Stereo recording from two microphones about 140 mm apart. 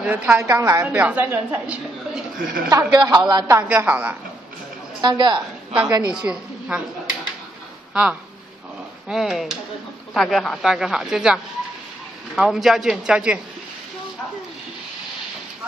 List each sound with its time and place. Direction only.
0.0 s a woman's voice: 10° right (ahead or behind)
2.3 s a woman's voice: 90° right
2.9 s a woman's voice: 30° right (ahead or behind)
3.5 s a woman's voice: 15° right (ahead or behind)
5.0 s a woman's voice: 30° right (ahead or behind)
6.1 s speech: 5° right (ahead or behind)
7.9 s a woman's voice: 5° right (ahead or behind)